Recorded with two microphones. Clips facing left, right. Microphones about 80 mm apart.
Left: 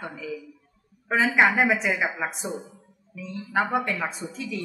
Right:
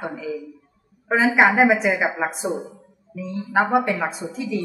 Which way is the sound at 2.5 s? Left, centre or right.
Centre.